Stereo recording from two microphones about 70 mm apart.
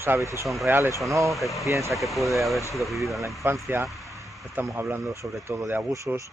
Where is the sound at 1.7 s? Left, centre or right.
Right.